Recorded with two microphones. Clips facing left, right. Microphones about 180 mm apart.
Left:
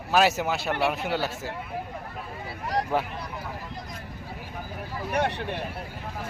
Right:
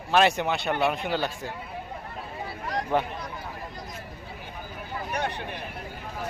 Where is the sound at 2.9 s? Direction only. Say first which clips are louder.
Right 3 dB; 5° left (ahead or behind).